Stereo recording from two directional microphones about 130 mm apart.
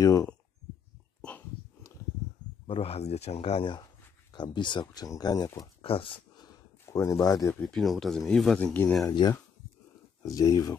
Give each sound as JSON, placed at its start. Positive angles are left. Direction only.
{"t": 0.0, "sound": "speech", "side_deg": 25}
{"t": 2.6, "sound": "speech", "side_deg": 50}
{"t": 4.3, "sound": "speech", "side_deg": 35}
{"t": 5.8, "sound": "a sound", "side_deg": 45}
{"t": 7.6, "sound": "speech", "side_deg": 0}
{"t": 9.2, "sound": "speech", "side_deg": 35}
{"t": 10.2, "sound": "speech", "side_deg": 25}